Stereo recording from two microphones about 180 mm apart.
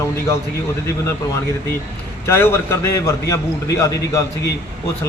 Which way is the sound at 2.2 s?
15° left (ahead or behind).